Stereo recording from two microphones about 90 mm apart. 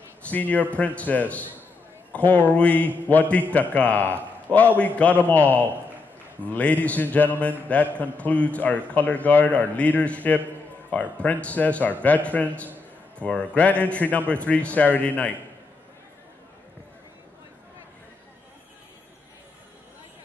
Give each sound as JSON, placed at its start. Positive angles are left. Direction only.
{"t": 0.2, "sound": "a man's voice", "side_deg": 15}